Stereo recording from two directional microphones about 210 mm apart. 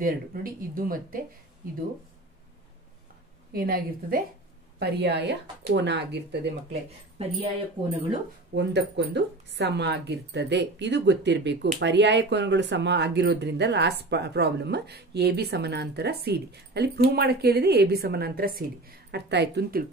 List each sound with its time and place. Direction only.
0.0 s speech: 45° right (ahead or behind)
3.5 s speech: 45° right (ahead or behind)
7.2 s speech: 30° right (ahead or behind)
8.5 s speech: 55° right (ahead or behind)